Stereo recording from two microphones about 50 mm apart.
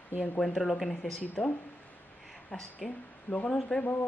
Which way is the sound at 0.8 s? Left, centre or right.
Centre.